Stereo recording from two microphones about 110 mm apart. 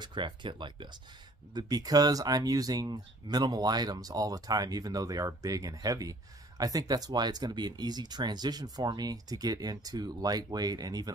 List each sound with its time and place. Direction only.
0.0 s speech: 45° right (ahead or behind)